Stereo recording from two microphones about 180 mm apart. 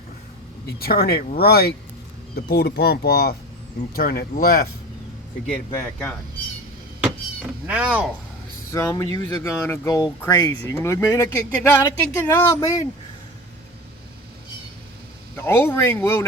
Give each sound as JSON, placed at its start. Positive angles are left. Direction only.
{"t": 0.8, "sound": "speech", "side_deg": 60}
{"t": 5.7, "sound": "speech", "side_deg": 10}
{"t": 7.7, "sound": "speech", "side_deg": -5}
{"t": 8.7, "sound": "speech", "side_deg": 15}
{"t": 15.4, "sound": "speech", "side_deg": 10}